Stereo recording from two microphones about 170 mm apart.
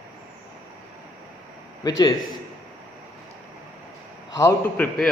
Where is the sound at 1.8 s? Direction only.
20° left (ahead or behind).